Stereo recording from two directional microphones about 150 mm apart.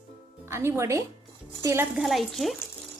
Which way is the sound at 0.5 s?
20° right (ahead or behind).